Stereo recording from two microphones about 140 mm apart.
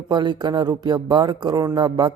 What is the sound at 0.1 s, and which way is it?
A man's voice, 30° right (ahead or behind).